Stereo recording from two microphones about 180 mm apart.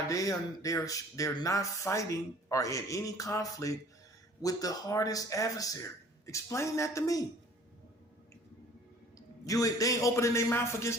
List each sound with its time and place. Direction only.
0.1 s a man's voice: 20° left (ahead or behind)
9.1 s a man's voice: 20° left (ahead or behind)